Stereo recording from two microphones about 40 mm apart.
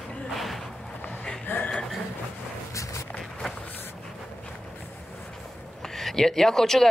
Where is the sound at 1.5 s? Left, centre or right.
Left.